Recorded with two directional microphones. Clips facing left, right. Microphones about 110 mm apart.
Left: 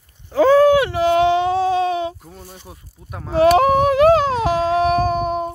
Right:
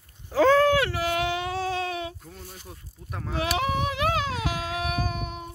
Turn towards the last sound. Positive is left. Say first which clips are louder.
# left 13 dB
turn(degrees=40)  # may be behind; listen again after turning